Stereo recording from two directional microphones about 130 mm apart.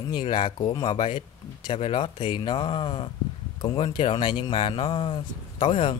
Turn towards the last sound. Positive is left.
turn(degrees=40)  # may be behind; listen again after turning